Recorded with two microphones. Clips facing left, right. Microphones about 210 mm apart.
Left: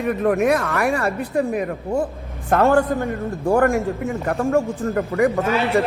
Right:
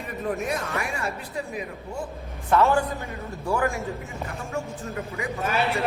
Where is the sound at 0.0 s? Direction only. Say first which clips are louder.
Left 11 dB; 65° left (ahead or behind).